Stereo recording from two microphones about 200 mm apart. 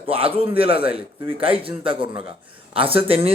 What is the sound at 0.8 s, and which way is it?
Speech, 10° right (ahead or behind).